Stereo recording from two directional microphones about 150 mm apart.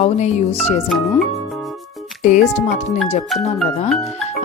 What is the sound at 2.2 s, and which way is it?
Speech, 50° left (ahead or behind).